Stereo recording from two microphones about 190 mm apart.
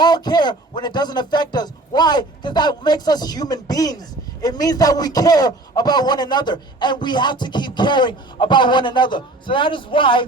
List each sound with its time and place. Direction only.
0.0 s a man's voice: 20° left (ahead or behind)